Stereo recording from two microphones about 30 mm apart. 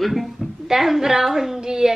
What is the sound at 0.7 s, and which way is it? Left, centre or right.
Speech, centre.